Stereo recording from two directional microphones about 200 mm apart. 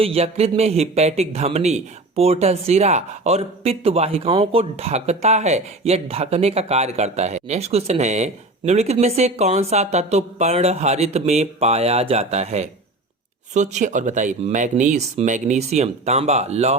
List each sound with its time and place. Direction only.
0.0 s speech: 30° right (ahead or behind)